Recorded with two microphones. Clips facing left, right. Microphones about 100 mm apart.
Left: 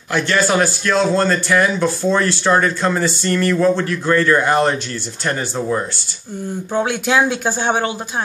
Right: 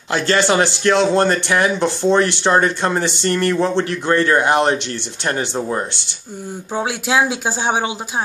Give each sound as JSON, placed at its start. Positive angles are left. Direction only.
{"t": 0.1, "sound": "speech", "side_deg": -30}
{"t": 6.7, "sound": "speech", "side_deg": -5}